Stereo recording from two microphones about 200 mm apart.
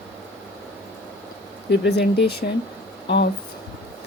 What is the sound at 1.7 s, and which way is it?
Speech, 55° left (ahead or behind).